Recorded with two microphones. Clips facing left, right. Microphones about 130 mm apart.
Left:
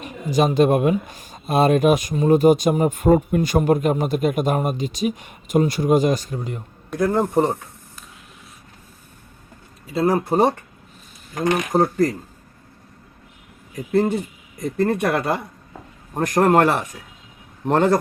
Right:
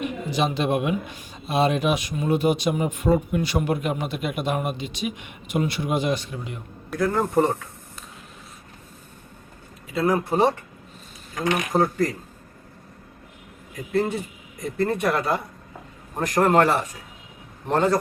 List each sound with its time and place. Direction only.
0.0 s speech: 45° left (ahead or behind)
7.0 s speech: 20° left (ahead or behind)
9.9 s speech: 35° left (ahead or behind)
14.8 s a man's voice: 55° left (ahead or behind)